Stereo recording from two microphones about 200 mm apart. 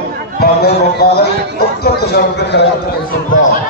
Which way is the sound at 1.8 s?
55° left (ahead or behind).